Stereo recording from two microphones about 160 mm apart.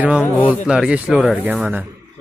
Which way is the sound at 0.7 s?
5° right (ahead or behind).